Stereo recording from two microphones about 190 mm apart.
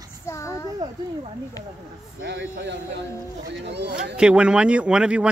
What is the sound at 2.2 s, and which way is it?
Speech, 65° right (ahead or behind).